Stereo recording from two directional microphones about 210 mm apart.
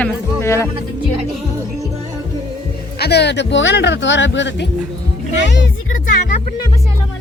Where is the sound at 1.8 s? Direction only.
15° right (ahead or behind).